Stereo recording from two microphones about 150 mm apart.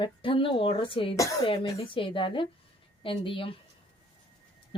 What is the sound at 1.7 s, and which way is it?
Speech, 35° left (ahead or behind).